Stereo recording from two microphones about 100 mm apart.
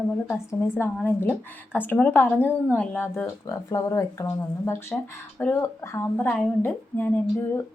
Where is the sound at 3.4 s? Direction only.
35° left (ahead or behind).